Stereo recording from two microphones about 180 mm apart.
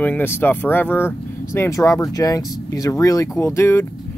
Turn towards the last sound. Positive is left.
turn(degrees=15)  # may be behind; listen again after turning